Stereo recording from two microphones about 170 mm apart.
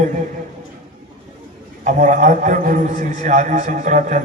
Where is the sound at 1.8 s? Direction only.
50° right (ahead or behind).